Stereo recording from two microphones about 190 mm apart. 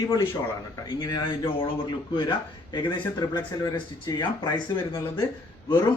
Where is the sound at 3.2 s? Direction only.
20° left (ahead or behind).